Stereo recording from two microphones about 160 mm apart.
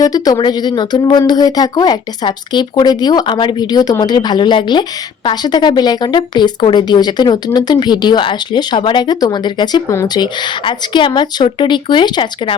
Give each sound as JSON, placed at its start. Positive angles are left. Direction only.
{"t": 0.0, "sound": "speech", "side_deg": 25}